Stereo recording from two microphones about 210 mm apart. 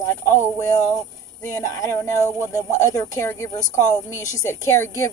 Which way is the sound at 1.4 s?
15° left (ahead or behind).